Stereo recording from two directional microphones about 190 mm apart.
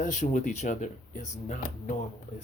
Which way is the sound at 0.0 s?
40° left (ahead or behind).